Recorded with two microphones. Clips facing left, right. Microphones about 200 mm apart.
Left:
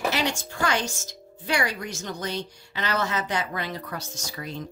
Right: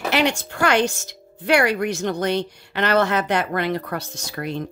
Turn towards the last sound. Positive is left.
turn(degrees=-60)  # may be behind; listen again after turning